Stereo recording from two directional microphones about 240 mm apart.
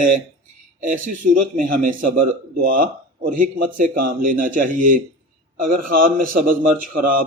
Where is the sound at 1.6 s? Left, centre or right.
Right.